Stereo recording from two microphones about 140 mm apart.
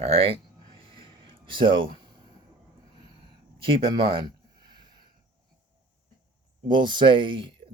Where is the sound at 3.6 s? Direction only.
40° right (ahead or behind).